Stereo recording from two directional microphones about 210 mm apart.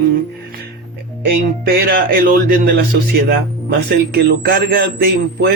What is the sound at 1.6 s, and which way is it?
Speech, 45° right (ahead or behind).